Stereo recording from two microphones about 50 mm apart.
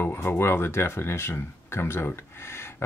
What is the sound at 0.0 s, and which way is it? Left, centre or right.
Speech, left.